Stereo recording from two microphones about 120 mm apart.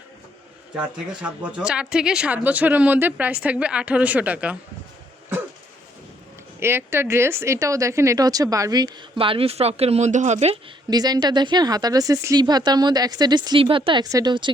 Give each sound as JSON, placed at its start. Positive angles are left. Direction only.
{"t": 0.8, "sound": "speech", "side_deg": -10}
{"t": 6.6, "sound": "speech", "side_deg": -20}
{"t": 9.1, "sound": "speech", "side_deg": -50}
{"t": 10.8, "sound": "speech", "side_deg": -35}
{"t": 14.0, "sound": "speech", "side_deg": -30}